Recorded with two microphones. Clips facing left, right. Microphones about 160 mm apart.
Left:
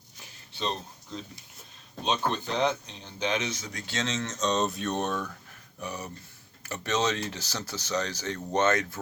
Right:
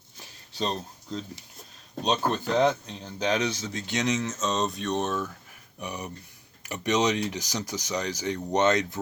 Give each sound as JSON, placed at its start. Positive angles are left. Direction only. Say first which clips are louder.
{"t": 2.0, "sound": "speech", "louder": "right 3 dB", "side_deg": -45}
{"t": 5.8, "sound": "speech", "louder": "right 1 dB", "side_deg": -15}